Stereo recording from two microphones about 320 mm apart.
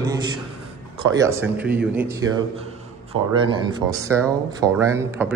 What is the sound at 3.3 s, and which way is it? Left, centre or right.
Speech, centre.